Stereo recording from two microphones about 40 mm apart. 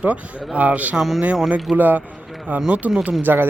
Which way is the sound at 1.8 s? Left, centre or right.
Right.